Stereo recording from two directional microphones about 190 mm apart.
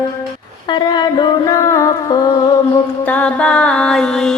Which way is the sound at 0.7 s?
20° left (ahead or behind).